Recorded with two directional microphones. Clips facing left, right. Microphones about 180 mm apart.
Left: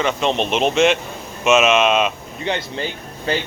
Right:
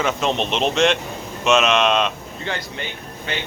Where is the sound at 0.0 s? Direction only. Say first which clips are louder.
Left 2 dB; centre (ahead or behind).